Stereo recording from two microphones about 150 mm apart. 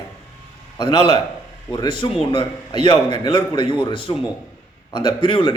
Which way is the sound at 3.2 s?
35° left (ahead or behind).